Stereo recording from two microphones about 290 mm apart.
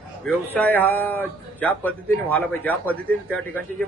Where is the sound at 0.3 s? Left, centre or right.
Centre.